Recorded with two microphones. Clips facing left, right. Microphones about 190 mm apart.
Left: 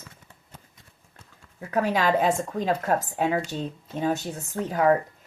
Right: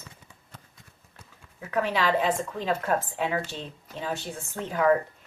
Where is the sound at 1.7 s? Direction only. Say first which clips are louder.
Left 2 dB; 40° left (ahead or behind).